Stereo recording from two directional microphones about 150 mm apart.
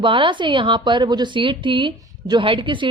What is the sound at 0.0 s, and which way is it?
A woman's voice, 35° right (ahead or behind).